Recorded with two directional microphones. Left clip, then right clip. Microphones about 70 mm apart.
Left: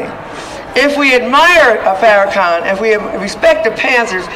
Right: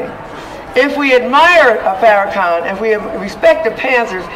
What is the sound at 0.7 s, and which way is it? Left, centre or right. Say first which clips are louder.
Speech: left 1 dB; centre.